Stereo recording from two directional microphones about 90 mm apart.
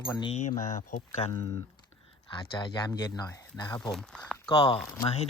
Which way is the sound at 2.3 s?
60° left (ahead or behind).